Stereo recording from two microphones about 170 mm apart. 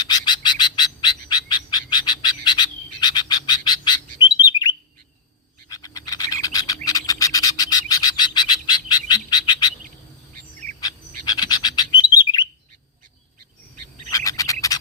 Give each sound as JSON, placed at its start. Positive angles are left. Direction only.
{"t": 0.1, "sound": "bird", "side_deg": 25}
{"t": 10.3, "sound": "bird", "side_deg": -45}
{"t": 10.8, "sound": "bird", "side_deg": 25}
{"t": 14.1, "sound": "a sound", "side_deg": 20}